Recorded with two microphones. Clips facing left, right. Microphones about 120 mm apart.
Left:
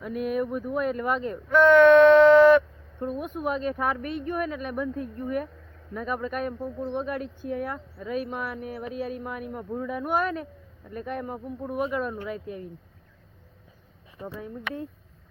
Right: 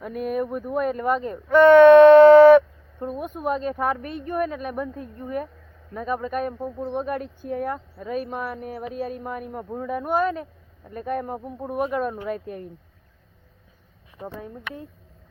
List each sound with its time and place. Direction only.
0.0 s speech: 40° right (ahead or behind)
0.4 s speech: 5° right (ahead or behind)
0.8 s speech: 40° right (ahead or behind)
1.5 s speech: 50° right (ahead or behind)
3.1 s speech: centre (ahead or behind)
3.3 s speech: 40° right (ahead or behind)
6.5 s speech: 20° right (ahead or behind)
6.9 s speech: 40° right (ahead or behind)
14.3 s speech: 40° right (ahead or behind)